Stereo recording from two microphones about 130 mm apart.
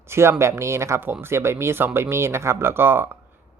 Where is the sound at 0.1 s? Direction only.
20° right (ahead or behind).